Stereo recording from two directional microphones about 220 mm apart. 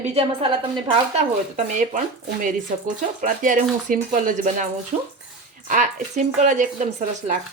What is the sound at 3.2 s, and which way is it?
Speech, 35° right (ahead or behind).